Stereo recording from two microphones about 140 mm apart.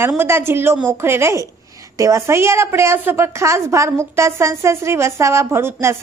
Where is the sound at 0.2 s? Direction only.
15° right (ahead or behind).